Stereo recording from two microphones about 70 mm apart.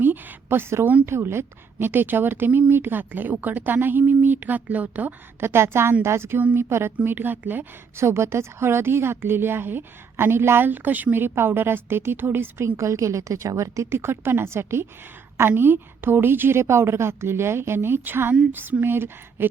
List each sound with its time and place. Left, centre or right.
0.0 s a woman's voice: right
5.4 s a woman's voice: right
7.9 s a woman's voice: right